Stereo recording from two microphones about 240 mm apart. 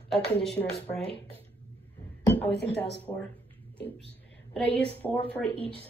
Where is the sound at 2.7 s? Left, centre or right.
Left.